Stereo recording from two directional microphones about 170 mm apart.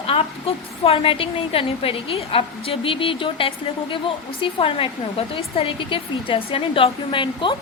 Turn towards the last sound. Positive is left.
turn(degrees=30)  # may be behind; listen again after turning